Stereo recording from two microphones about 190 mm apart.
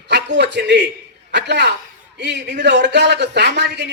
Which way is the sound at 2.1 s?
65° right (ahead or behind).